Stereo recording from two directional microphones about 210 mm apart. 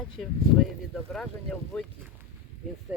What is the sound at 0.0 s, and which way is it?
Speech, centre (ahead or behind).